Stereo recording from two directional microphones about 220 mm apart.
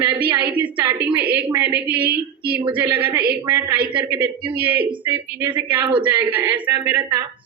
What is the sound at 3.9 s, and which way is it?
Speech, 20° right (ahead or behind).